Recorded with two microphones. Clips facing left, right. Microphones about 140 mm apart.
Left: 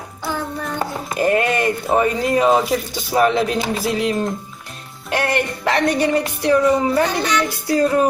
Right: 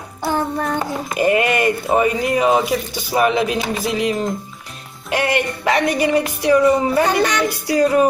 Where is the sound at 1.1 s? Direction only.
10° right (ahead or behind).